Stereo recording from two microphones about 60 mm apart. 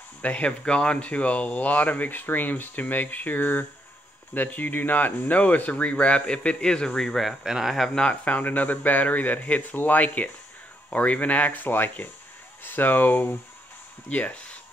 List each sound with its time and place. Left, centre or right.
0.2 s speech: left
8.1 s speech: left